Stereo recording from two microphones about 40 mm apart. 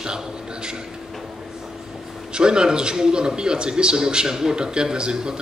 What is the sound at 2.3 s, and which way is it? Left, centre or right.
Speech, right.